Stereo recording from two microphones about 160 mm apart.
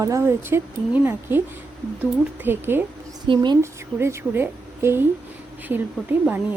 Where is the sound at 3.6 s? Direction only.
15° right (ahead or behind).